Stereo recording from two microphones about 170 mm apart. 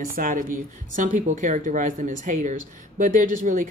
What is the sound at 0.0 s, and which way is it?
Speech, 55° right (ahead or behind).